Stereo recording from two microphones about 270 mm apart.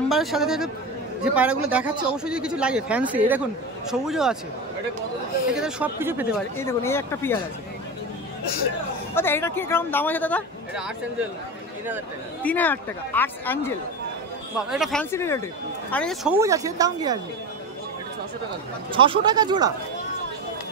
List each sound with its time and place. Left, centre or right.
0.1 s speech: centre
5.5 s speech: centre
6.6 s speech: centre
9.1 s speech: centre
12.4 s speech: centre
16.3 s speech: centre
18.9 s speech: centre